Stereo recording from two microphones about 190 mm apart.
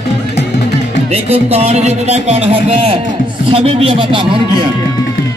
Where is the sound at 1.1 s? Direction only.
35° right (ahead or behind).